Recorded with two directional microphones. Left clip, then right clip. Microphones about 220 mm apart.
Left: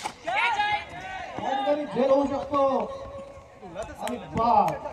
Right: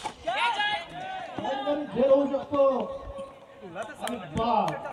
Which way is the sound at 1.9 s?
45° left (ahead or behind).